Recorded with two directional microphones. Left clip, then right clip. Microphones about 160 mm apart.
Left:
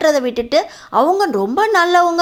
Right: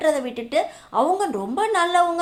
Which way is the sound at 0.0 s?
35° left (ahead or behind).